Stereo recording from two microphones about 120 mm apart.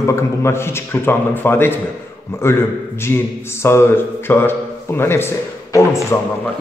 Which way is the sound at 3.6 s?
20° left (ahead or behind).